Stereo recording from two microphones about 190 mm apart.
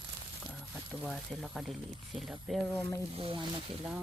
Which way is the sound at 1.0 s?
Centre (ahead or behind).